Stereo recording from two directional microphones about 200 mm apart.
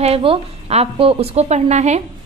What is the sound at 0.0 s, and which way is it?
A woman's voice, 30° right (ahead or behind).